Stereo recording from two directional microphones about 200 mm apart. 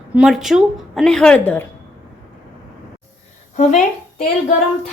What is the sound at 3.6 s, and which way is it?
Speech, 35° left (ahead or behind).